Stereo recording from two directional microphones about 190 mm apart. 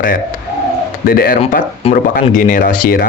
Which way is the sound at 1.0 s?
50° left (ahead or behind).